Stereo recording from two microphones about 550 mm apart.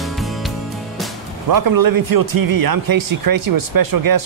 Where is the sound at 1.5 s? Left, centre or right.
Right.